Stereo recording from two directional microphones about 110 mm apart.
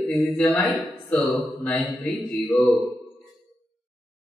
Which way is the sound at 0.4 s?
5° left (ahead or behind).